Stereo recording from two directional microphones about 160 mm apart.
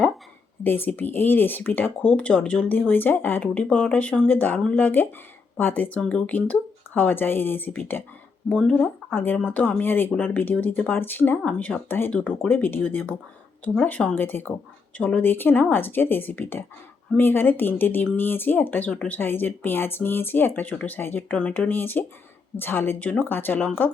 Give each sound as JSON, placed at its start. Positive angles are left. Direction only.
{"t": 0.6, "sound": "speech", "side_deg": 15}